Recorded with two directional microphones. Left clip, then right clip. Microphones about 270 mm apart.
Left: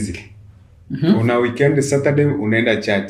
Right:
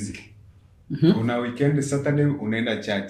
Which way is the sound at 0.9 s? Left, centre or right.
Right.